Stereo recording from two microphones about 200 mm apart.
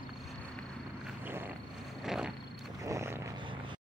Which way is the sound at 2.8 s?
15° right (ahead or behind).